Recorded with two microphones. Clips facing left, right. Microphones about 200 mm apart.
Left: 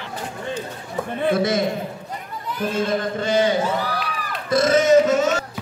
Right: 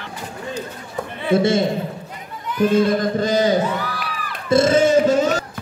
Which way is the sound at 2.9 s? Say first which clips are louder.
Right 3 dB; 40° right (ahead or behind).